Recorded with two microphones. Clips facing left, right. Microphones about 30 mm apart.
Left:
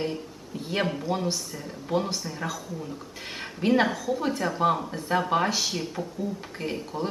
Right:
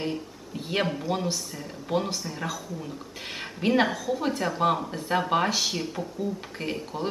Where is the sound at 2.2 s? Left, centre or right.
Centre.